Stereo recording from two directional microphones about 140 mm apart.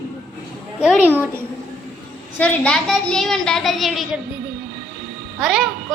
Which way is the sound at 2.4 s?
5° left (ahead or behind).